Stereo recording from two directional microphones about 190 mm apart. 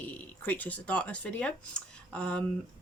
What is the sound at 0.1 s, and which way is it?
Speech, 10° left (ahead or behind).